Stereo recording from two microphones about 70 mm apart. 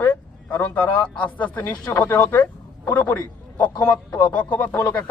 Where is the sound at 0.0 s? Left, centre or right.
Left.